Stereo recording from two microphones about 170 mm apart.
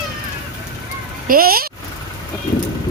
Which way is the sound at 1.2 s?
60° right (ahead or behind).